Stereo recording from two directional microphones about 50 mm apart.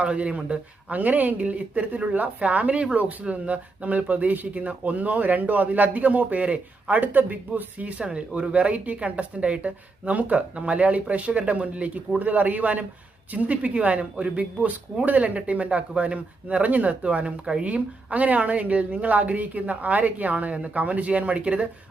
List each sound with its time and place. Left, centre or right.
0.0 s a man's voice: right